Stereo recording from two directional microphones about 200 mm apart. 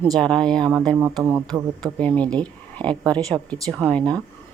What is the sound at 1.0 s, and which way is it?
Speech, 10° right (ahead or behind).